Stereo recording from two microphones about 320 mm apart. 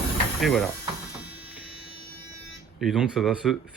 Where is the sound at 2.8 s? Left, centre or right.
Centre.